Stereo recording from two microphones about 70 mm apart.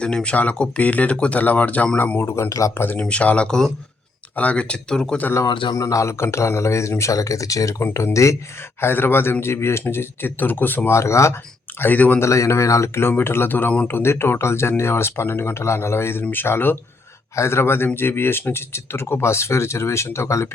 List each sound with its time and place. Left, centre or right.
0.0 s speech: centre
2.2 s speech: left
2.7 s speech: left
3.0 s speech: centre
5.7 s speech: left
8.8 s speech: left
10.9 s speech: left
11.8 s speech: left
12.2 s speech: left